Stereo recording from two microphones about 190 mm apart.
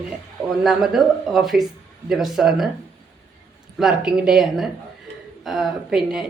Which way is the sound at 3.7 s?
5° right (ahead or behind).